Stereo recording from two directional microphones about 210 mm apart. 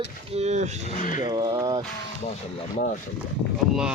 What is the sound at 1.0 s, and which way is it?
Speech, 40° left (ahead or behind).